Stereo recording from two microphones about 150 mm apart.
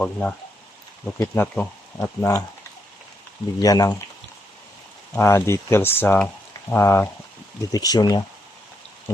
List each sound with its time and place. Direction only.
0.0 s speech: 5° left (ahead or behind)
3.6 s speech: 25° left (ahead or behind)
5.1 s speech: 15° left (ahead or behind)